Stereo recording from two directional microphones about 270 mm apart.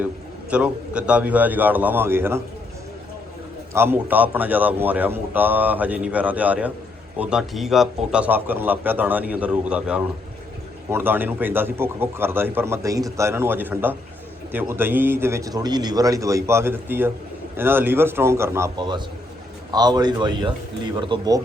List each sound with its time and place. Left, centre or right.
0.5 s a man's voice: centre
3.7 s a man's voice: centre